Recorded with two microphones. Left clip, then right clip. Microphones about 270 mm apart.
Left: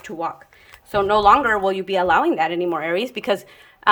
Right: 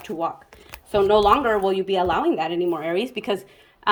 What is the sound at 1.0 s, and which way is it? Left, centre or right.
A woman's voice, centre.